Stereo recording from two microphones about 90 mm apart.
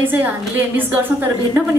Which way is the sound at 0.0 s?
20° right (ahead or behind).